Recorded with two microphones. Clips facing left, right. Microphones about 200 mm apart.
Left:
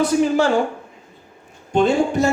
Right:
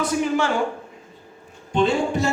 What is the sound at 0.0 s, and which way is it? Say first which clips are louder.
Speech: left 5 dB; 35° left (ahead or behind).